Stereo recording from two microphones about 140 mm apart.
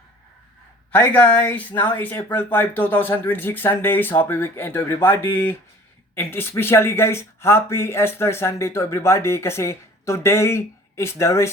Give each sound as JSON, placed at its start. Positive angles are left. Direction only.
{"t": 0.9, "sound": "speech", "side_deg": 10}